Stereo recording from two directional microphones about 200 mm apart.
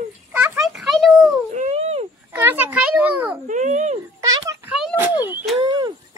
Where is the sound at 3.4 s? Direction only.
40° right (ahead or behind).